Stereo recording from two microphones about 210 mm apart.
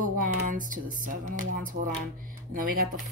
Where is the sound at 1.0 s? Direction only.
40° right (ahead or behind).